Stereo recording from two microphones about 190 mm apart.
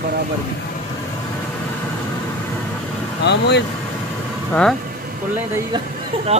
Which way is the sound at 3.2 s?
65° left (ahead or behind).